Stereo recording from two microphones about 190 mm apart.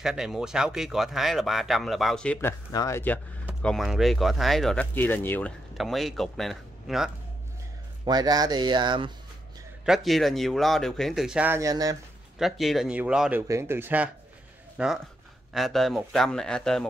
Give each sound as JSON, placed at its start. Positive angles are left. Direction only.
{"t": 0.0, "sound": "speech", "side_deg": -5}
{"t": 2.7, "sound": "speech", "side_deg": 15}
{"t": 3.6, "sound": "speech", "side_deg": 0}
{"t": 5.8, "sound": "speech", "side_deg": 0}
{"t": 8.0, "sound": "speech", "side_deg": -20}
{"t": 9.8, "sound": "speech", "side_deg": 0}
{"t": 12.4, "sound": "speech", "side_deg": 0}